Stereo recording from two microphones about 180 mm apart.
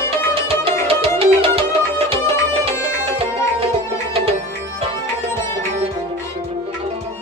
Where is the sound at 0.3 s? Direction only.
30° right (ahead or behind).